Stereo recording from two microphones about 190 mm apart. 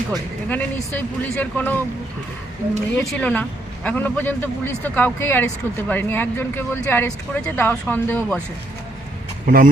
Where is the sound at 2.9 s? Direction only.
5° left (ahead or behind).